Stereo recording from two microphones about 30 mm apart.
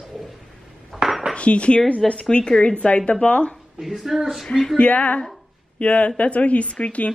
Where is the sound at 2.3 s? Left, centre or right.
Left.